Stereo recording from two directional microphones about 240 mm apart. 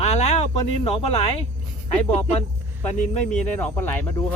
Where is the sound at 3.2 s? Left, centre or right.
Centre.